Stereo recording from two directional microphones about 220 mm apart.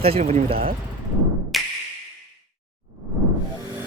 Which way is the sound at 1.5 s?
Centre (ahead or behind).